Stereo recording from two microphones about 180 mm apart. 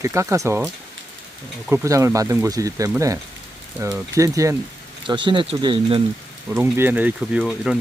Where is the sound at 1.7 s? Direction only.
15° right (ahead or behind).